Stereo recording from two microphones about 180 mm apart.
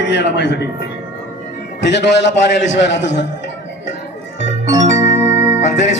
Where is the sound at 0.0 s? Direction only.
70° left (ahead or behind).